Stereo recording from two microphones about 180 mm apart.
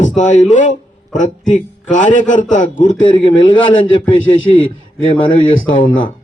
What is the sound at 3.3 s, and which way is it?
A man's voice, 90° left.